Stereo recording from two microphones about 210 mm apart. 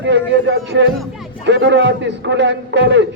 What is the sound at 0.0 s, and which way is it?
Speech, 55° right (ahead or behind).